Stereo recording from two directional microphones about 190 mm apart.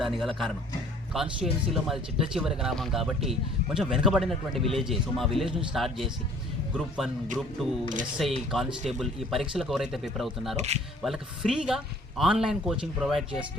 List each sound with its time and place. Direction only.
0.0 s speech: centre (ahead or behind)
8.2 s speech: centre (ahead or behind)
10.6 s speech: 35° right (ahead or behind)
11.0 s speech: centre (ahead or behind)